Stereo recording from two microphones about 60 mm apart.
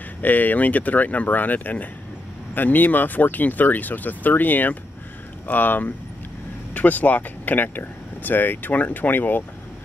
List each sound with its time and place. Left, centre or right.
0.2 s speech: left